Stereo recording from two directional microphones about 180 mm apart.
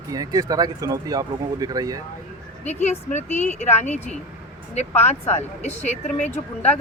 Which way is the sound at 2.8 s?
40° left (ahead or behind).